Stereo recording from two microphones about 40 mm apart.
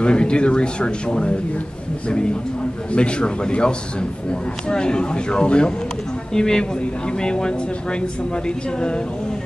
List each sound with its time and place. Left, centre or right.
0.0 s a man's voice: left
6.3 s a man's voice: centre